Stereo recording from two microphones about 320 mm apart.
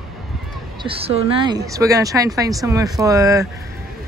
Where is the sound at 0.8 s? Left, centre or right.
Centre.